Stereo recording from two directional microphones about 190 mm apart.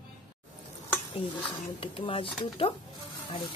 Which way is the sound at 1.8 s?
30° left (ahead or behind).